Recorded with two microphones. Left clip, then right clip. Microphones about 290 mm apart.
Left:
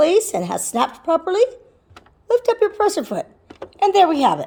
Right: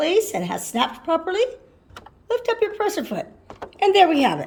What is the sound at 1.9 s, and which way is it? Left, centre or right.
Speech, centre.